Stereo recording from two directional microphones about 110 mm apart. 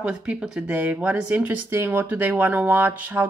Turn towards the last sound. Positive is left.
turn(degrees=-20)  # may be behind; listen again after turning